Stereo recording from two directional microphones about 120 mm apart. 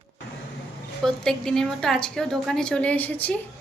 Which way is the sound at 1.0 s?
5° left (ahead or behind).